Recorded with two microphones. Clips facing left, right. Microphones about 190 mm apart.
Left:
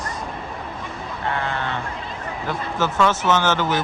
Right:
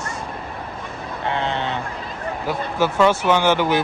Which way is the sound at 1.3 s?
20° right (ahead or behind).